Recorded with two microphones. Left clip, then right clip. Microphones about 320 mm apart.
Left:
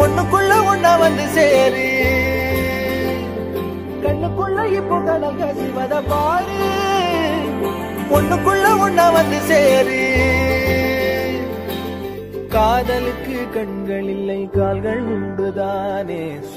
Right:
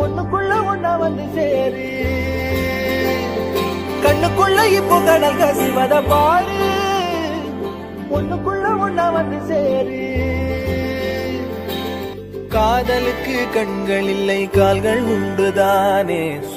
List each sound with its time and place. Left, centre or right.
0.3 s music: left
2.0 s music: centre
2.5 s music: centre
3.5 s music: right; by 7.2 s centre
8.1 s music: left; by 11.1 s centre
12.5 s music: centre
13.6 s music: right
14.6 s music: right